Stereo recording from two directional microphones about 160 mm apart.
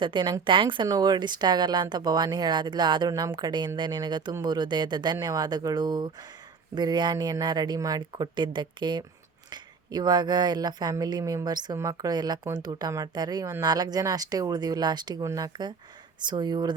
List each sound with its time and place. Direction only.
0.0 s a woman's voice: 30° right (ahead or behind)